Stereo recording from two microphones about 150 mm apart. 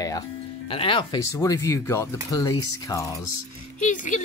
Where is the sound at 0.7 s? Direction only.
35° left (ahead or behind).